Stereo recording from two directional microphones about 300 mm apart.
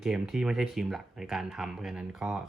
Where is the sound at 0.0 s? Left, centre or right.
Centre.